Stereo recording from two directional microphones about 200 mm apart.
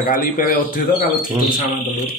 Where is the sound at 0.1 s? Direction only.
45° left (ahead or behind).